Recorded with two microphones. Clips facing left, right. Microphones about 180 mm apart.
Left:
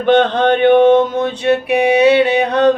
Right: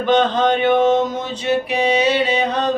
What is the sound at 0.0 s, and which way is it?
Mantra, 60° left (ahead or behind).